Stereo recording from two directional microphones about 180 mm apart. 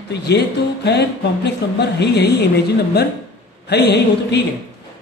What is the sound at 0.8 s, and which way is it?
Speech, 70° left (ahead or behind).